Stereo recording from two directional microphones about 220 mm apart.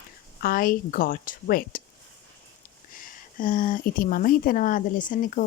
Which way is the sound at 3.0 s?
40° left (ahead or behind).